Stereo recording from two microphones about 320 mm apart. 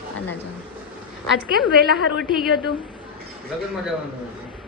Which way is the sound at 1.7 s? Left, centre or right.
Right.